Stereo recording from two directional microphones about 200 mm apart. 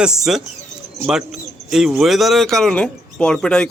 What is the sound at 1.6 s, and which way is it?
Speech, centre (ahead or behind).